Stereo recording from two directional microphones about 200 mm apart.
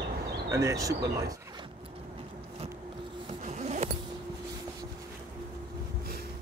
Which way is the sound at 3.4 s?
35° right (ahead or behind).